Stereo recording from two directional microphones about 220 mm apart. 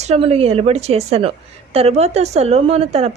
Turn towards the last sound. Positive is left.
turn(degrees=-30)  # may be behind; listen again after turning